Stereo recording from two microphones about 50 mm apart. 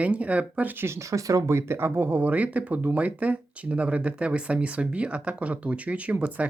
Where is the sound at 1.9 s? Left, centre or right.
Right.